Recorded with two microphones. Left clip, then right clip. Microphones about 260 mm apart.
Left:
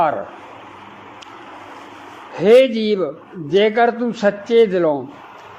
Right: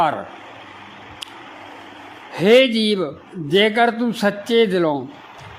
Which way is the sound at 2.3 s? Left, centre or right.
Right.